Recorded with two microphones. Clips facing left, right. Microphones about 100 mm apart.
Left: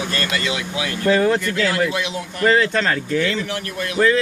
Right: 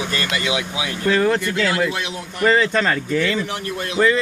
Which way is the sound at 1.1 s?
10° left (ahead or behind).